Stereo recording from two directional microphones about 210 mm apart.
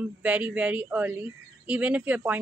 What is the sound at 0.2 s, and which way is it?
Speech, 5° right (ahead or behind).